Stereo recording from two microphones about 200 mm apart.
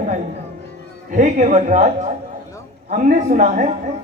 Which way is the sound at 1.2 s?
40° right (ahead or behind).